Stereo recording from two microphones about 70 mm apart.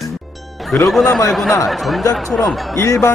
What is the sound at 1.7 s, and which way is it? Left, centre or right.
Speech, centre.